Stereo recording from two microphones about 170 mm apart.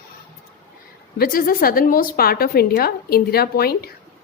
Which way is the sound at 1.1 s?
60° left (ahead or behind).